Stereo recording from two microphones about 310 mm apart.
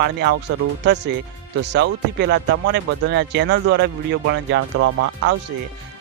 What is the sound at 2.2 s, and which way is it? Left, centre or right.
Speech, right.